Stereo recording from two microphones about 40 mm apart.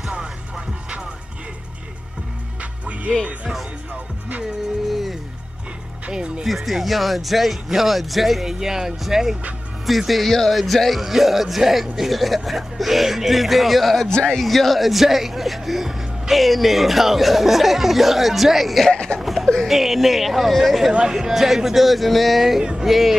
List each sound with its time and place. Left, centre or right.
2.6 s music: right
6.1 s music: right
6.4 s speech: centre
14.0 s speech: centre
14.4 s speech: centre
18.9 s laughter: centre
19.1 s a sound: centre
19.7 s speech: centre
22.6 s music: centre
22.8 s speech: centre